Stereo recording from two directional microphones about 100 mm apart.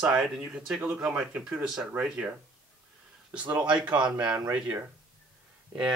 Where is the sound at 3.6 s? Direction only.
50° right (ahead or behind).